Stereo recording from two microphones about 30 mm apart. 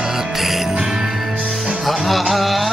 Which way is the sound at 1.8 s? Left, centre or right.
Centre.